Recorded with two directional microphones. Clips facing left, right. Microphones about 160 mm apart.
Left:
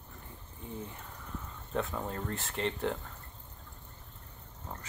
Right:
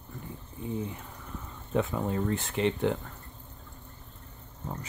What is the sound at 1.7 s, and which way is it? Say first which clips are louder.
Speech: right 6 dB; 5° right (ahead or behind).